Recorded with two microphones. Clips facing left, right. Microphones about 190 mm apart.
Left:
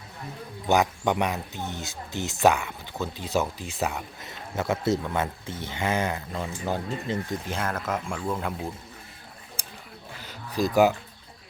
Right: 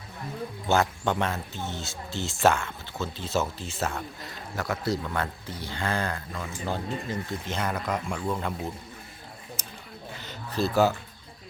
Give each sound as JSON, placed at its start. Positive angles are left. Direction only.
{"t": 0.7, "sound": "speech", "side_deg": 15}
{"t": 7.5, "sound": "speech", "side_deg": 0}
{"t": 10.2, "sound": "a sound", "side_deg": 10}